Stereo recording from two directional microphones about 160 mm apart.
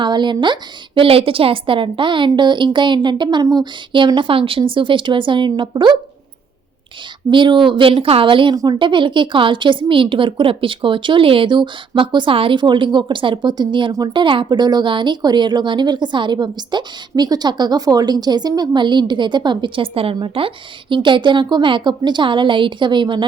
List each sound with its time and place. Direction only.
0.0 s a woman's voice: 30° right (ahead or behind)
7.3 s a woman's voice: 30° right (ahead or behind)